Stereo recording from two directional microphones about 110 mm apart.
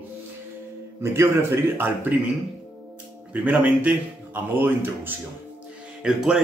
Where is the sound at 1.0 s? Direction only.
20° right (ahead or behind).